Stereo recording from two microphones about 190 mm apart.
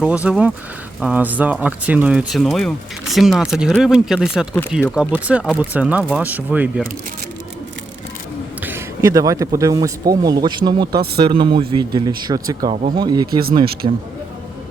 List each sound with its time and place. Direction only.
0.0 s speech: 5° right (ahead or behind)
8.6 s speech: 15° right (ahead or behind)